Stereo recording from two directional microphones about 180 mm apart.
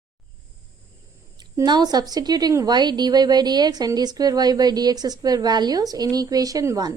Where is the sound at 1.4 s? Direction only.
25° right (ahead or behind).